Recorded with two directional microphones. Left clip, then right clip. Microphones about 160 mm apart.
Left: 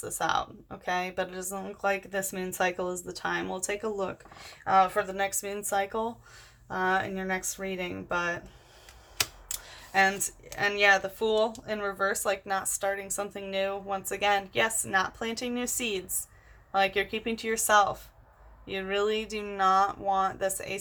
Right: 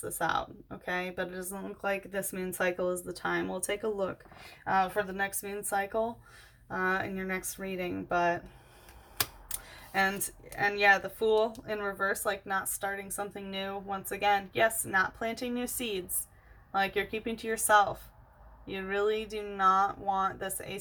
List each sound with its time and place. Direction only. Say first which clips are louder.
0.0 s speech: left 2 dB; 30° left (ahead or behind)
4.6 s speech: left 5 dB; 35° left (ahead or behind)
9.9 s speech: left 5 dB; 20° left (ahead or behind)